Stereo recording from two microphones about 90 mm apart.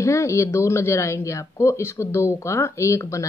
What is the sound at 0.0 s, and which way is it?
Speech, 35° left (ahead or behind).